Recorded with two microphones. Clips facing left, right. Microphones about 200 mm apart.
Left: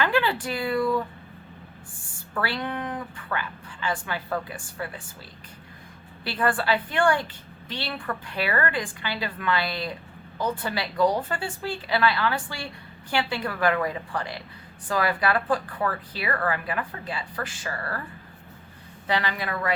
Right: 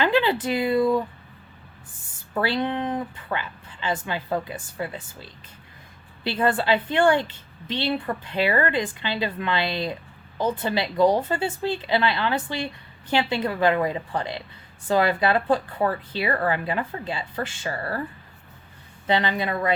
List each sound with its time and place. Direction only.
0.0 s speech: 20° right (ahead or behind)
2.3 s a woman's voice: 20° right (ahead or behind)
6.2 s a woman's voice: 20° right (ahead or behind)
19.0 s a woman's voice: 25° right (ahead or behind)